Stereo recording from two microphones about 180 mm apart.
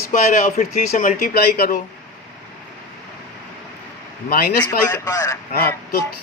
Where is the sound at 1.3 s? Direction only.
60° left (ahead or behind).